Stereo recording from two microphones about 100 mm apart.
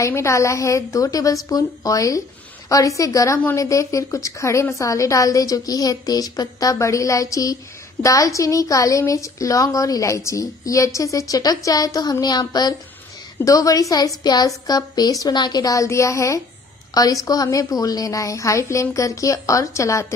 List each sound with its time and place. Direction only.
0.0 s a woman's voice: 30° left (ahead or behind)